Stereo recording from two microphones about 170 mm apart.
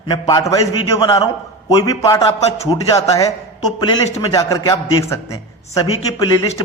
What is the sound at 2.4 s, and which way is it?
Speech, 40° left (ahead or behind).